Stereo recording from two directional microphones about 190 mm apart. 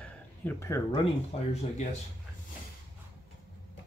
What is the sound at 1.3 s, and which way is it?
Speech, 35° left (ahead or behind).